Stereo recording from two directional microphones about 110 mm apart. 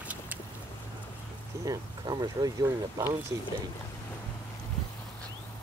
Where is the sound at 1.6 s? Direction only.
35° right (ahead or behind).